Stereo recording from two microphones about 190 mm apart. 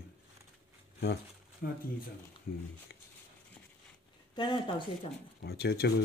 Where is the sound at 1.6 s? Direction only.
55° left (ahead or behind).